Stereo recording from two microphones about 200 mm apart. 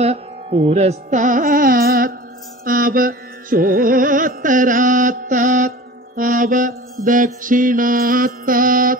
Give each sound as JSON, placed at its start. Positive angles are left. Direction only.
{"t": 0.0, "sound": "carnatic music", "side_deg": -30}
{"t": 7.4, "sound": "mantra", "side_deg": -45}